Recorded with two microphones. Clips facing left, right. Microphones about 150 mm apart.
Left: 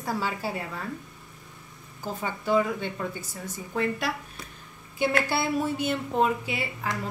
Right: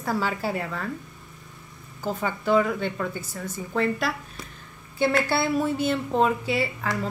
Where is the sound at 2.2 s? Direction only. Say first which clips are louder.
Right 3 dB; 15° left (ahead or behind).